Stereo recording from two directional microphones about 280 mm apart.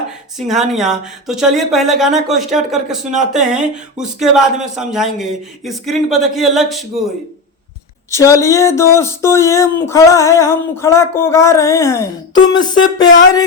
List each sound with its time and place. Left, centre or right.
0.3 s a man's voice: centre
8.1 s speech: centre
12.8 s a sound: left